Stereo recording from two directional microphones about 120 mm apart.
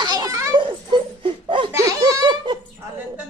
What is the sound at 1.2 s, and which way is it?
Laughter, 45° right (ahead or behind).